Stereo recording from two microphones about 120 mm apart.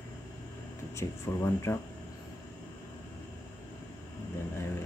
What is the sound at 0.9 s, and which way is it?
Speech, 25° left (ahead or behind).